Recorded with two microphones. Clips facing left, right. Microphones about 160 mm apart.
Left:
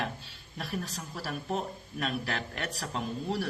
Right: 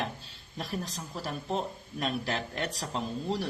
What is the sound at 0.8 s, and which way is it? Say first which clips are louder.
Speech: right 1 dB; 20° right (ahead or behind).